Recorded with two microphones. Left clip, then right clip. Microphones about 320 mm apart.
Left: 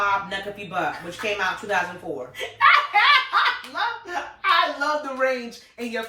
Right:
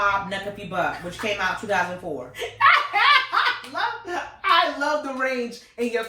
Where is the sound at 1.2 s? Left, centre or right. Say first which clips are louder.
Even; centre.